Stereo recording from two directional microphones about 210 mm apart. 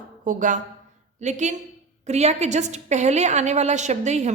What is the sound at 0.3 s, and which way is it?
A woman's voice, 35° right (ahead or behind).